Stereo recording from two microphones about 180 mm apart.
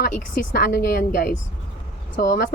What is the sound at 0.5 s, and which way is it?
Speech, 60° left (ahead or behind).